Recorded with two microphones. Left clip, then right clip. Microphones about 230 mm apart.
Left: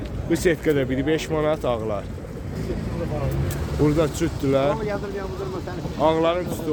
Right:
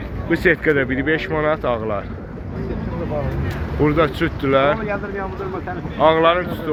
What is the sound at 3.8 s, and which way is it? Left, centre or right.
Speech, centre.